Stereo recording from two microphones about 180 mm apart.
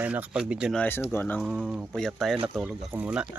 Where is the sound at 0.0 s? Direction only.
10° right (ahead or behind).